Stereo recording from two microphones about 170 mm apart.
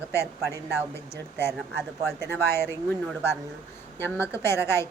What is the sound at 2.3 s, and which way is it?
Speech, 15° left (ahead or behind).